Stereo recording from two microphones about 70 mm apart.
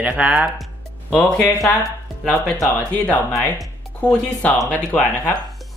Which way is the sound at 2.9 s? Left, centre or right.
Left.